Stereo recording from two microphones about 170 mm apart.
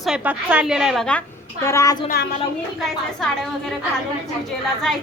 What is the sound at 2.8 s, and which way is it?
Speech, 5° left (ahead or behind).